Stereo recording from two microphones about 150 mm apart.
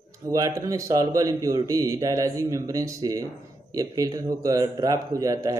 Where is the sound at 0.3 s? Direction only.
25° right (ahead or behind).